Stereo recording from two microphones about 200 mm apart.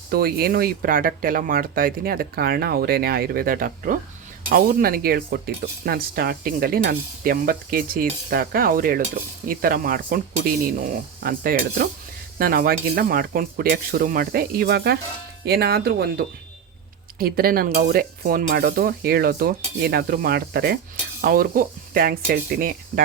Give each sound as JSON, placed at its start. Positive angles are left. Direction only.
{"t": 0.1, "sound": "sizzle", "side_deg": -50}